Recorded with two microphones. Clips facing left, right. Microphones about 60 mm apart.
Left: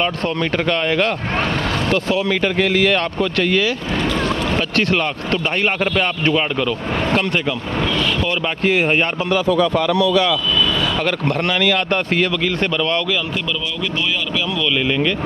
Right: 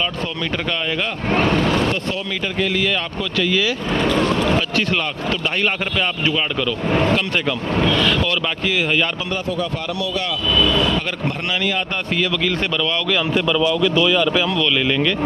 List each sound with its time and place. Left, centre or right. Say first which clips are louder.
2.4 s speech: left 2 dB; left
5.3 s speech: left 1 dB; left
8.6 s speech: left 5 dB; left
11.2 s speech: left 6 dB; left